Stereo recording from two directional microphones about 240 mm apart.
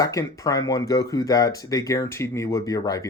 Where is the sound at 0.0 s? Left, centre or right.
Centre.